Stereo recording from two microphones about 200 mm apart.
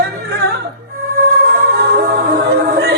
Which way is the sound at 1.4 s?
50° right (ahead or behind).